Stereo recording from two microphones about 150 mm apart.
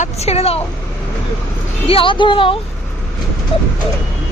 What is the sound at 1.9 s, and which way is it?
Speech, 35° left (ahead or behind).